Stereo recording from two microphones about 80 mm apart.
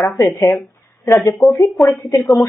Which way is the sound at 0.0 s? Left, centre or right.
Left.